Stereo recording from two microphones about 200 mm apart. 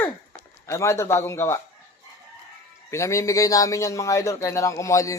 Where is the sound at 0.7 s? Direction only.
15° left (ahead or behind).